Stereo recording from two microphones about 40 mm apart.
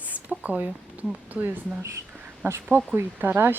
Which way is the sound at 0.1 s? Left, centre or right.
Right.